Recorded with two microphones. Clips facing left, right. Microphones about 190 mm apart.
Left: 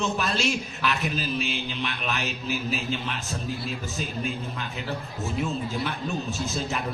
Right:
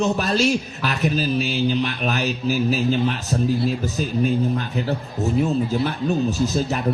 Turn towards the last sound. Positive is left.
turn(degrees=-40)  # may be behind; listen again after turning